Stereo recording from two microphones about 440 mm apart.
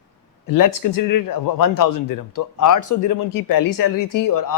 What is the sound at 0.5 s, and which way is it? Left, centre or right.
Speech, left.